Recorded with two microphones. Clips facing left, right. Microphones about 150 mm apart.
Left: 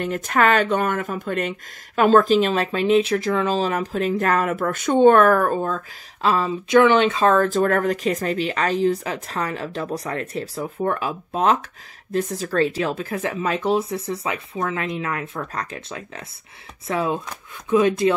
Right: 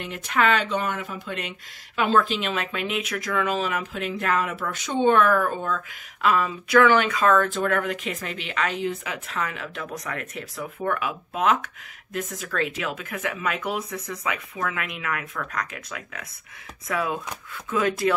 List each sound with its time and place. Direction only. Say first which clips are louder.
0.0 s speech: left 4 dB; 45° left (ahead or behind); by 18.1 s 20° left (ahead or behind)